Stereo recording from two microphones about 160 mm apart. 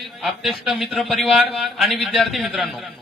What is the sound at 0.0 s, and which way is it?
A man's voice, centre (ahead or behind).